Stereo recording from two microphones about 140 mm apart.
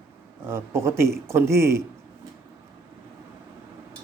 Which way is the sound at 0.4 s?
20° right (ahead or behind).